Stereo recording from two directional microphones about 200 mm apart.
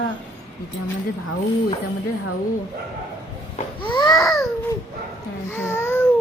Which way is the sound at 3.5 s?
25° left (ahead or behind).